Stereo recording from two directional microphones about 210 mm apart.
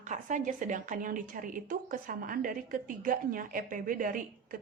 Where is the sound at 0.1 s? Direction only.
35° right (ahead or behind).